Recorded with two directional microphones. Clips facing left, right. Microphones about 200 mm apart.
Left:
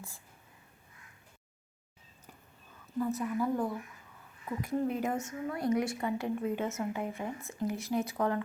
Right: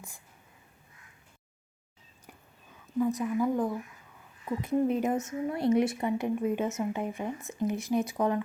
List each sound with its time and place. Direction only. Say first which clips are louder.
3.0 s a woman's voice: right 4 dB; 15° right (ahead or behind)